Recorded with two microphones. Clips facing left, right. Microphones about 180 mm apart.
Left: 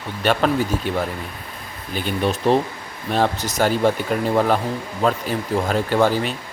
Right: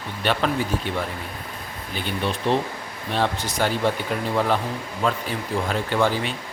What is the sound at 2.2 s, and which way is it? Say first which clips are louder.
Speech: left 5 dB; 40° left (ahead or behind).